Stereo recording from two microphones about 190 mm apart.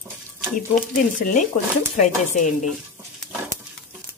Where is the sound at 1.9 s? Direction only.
40° left (ahead or behind).